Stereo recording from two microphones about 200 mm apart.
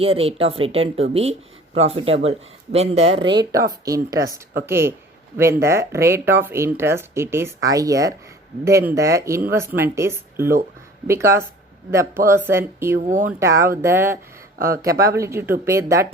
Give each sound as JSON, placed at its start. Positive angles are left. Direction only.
{"t": 0.0, "sound": "speech", "side_deg": -30}
{"t": 3.8, "sound": "speech", "side_deg": -15}
{"t": 13.0, "sound": "speech", "side_deg": -40}
{"t": 13.4, "sound": "speech", "side_deg": -15}